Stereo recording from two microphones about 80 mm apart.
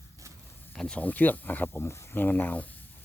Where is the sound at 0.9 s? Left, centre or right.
Left.